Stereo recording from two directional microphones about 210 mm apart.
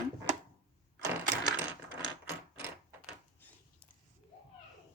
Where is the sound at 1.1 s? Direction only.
10° right (ahead or behind).